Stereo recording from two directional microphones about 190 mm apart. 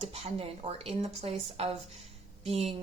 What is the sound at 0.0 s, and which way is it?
Speech, 35° right (ahead or behind).